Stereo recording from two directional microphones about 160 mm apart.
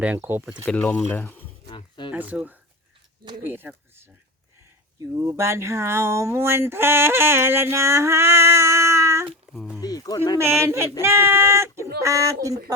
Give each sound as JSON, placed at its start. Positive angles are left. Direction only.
{"t": 0.0, "sound": "speech", "side_deg": -10}
{"t": 0.6, "sound": "speech", "side_deg": 10}
{"t": 1.7, "sound": "a sound", "side_deg": 30}
{"t": 2.1, "sound": "speech", "side_deg": -10}
{"t": 9.5, "sound": "speech", "side_deg": 0}
{"t": 9.8, "sound": "speech", "side_deg": 25}
{"t": 10.3, "sound": "speech", "side_deg": -15}